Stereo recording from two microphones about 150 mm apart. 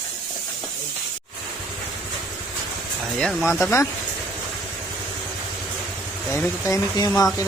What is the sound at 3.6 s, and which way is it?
Speech, 15° left (ahead or behind).